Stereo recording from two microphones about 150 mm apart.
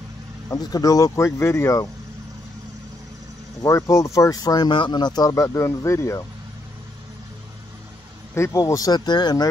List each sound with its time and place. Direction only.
0.5 s speech: 25° left (ahead or behind)
3.6 s speech: 20° left (ahead or behind)
8.4 s speech: 20° left (ahead or behind)